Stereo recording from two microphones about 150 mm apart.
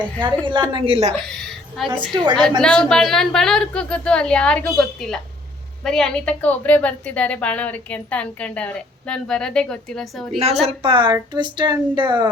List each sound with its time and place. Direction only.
0.2 s speech: 35° right (ahead or behind)
1.8 s speech: centre (ahead or behind)
2.1 s speech: 30° right (ahead or behind)
2.6 s a woman's voice: 5° left (ahead or behind)
10.7 s speech: 35° right (ahead or behind)